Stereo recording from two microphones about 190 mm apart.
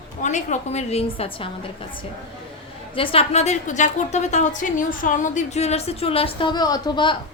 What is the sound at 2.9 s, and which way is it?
A woman's voice, 30° left (ahead or behind).